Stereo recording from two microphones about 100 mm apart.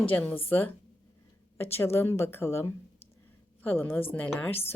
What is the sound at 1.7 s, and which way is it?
A woman's voice, 20° left (ahead or behind).